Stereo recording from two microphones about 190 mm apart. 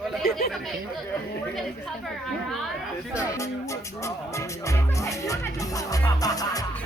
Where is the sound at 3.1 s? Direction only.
15° left (ahead or behind).